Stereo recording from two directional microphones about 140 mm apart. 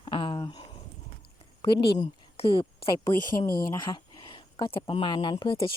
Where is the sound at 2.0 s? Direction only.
40° left (ahead or behind).